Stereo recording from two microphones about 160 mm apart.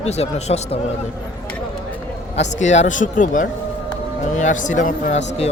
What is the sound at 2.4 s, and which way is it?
Speech, 45° left (ahead or behind).